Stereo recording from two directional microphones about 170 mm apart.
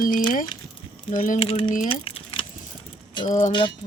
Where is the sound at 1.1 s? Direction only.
55° left (ahead or behind).